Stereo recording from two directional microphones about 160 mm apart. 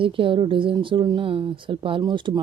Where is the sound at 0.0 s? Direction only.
35° right (ahead or behind).